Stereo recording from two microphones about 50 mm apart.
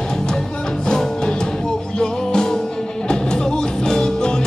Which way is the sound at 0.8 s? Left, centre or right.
Centre.